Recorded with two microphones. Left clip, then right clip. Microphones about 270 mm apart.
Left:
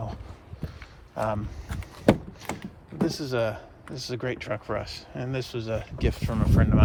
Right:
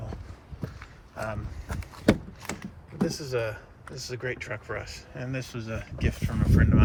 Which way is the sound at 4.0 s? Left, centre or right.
Centre.